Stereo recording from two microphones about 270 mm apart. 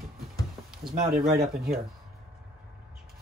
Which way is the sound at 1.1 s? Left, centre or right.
Right.